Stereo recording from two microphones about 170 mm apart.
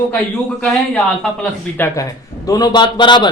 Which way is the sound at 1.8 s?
20° left (ahead or behind).